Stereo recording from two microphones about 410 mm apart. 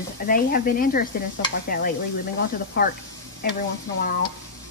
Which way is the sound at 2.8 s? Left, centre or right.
Left.